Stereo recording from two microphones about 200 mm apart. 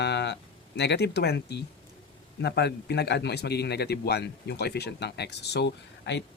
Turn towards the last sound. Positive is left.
turn(degrees=60)  # may be behind; listen again after turning